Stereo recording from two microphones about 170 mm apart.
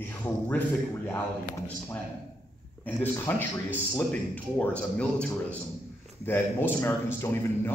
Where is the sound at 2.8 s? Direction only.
10° left (ahead or behind).